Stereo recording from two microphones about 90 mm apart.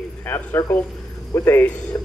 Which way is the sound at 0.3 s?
30° left (ahead or behind).